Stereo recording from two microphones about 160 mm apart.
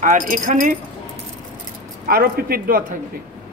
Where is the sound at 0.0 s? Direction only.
55° right (ahead or behind).